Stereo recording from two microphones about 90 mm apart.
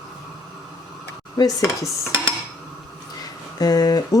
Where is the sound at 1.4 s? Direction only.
45° left (ahead or behind).